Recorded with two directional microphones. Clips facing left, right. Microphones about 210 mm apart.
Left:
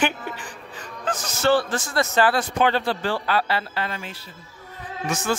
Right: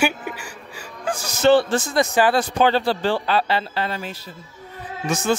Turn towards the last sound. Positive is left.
turn(degrees=-20)  # may be behind; listen again after turning